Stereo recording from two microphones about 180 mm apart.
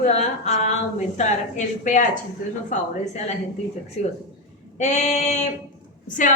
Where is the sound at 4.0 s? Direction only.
35° left (ahead or behind).